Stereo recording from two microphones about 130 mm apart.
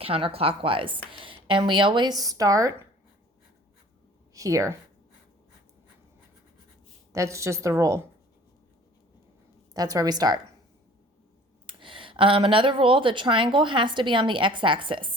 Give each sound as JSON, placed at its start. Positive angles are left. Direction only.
{"t": 0.0, "sound": "speech", "side_deg": -45}
{"t": 4.4, "sound": "a woman's voice", "side_deg": -25}
{"t": 7.1, "sound": "a woman's voice", "side_deg": -25}
{"t": 9.7, "sound": "a woman's voice", "side_deg": -30}
{"t": 11.6, "sound": "speech", "side_deg": -40}